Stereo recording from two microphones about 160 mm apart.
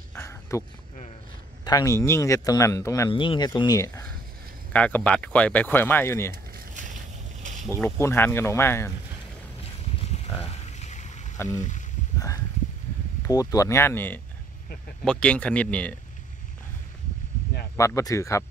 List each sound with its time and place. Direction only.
0.1 s a sound: 15° left (ahead or behind)
1.6 s speech: 25° left (ahead or behind)
3.1 s speech: 30° left (ahead or behind)
4.7 s speech: 10° left (ahead or behind)
6.3 s boat: 60° right (ahead or behind)
7.7 s speech: 15° left (ahead or behind)
9.6 s a sound: 35° left (ahead or behind)
11.4 s speech: 50° left (ahead or behind)
13.3 s speech: 20° left (ahead or behind)
17.7 s speech: 20° left (ahead or behind)